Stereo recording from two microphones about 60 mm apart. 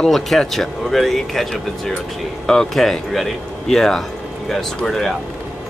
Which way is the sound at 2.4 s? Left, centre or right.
Centre.